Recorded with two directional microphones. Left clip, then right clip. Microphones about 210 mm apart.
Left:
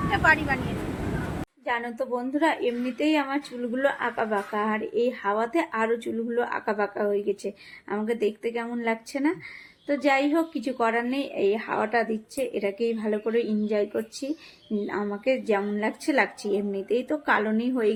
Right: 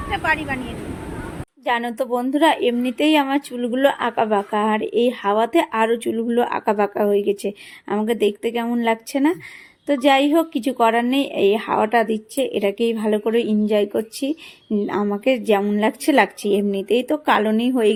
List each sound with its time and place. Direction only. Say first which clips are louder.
0.1 s speech: right 1 dB; 10° right (ahead or behind)
1.6 s a woman's voice: right 7 dB; 50° right (ahead or behind)